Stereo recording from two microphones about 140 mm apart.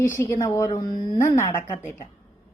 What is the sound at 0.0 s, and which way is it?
A woman's voice, 20° left (ahead or behind).